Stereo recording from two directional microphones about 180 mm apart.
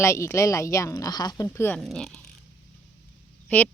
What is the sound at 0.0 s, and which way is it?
Speech, 15° left (ahead or behind).